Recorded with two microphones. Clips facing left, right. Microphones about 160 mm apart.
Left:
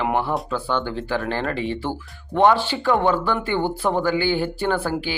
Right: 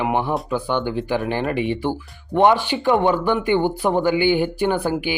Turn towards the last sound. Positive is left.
turn(degrees=-15)  # may be behind; listen again after turning